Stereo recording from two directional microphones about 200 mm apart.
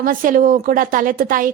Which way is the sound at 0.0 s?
45° right (ahead or behind).